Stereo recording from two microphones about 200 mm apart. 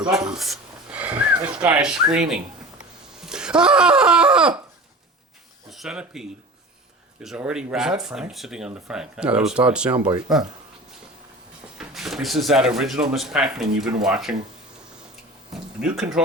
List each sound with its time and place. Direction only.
0.3 s speech: centre (ahead or behind)
3.2 s a sound: 5° right (ahead or behind)
5.7 s speech: 5° right (ahead or behind)
9.9 s speech: 20° right (ahead or behind)
10.2 s speech: centre (ahead or behind)
11.8 s speech: centre (ahead or behind)
16.2 s speech: 5° right (ahead or behind)